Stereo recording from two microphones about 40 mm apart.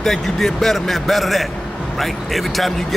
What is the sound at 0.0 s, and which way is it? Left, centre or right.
Speech, centre.